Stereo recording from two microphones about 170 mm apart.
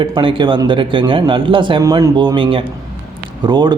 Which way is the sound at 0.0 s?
30° right (ahead or behind).